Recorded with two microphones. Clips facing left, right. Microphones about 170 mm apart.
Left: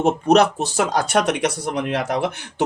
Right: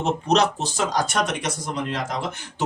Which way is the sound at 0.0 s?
55° left (ahead or behind).